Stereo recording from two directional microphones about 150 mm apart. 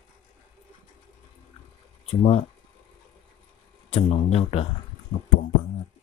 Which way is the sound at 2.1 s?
45° left (ahead or behind).